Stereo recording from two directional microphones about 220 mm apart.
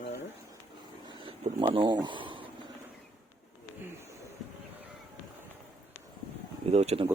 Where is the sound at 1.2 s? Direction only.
25° right (ahead or behind).